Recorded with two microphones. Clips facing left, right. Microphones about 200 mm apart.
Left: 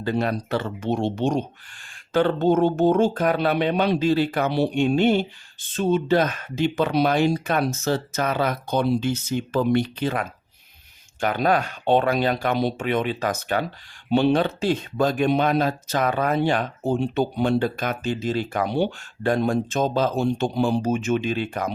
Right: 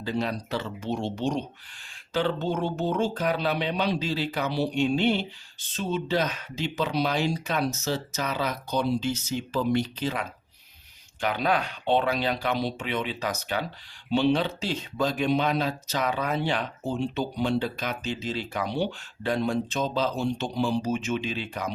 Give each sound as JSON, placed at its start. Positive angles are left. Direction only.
{"t": 0.0, "sound": "speech", "side_deg": 55}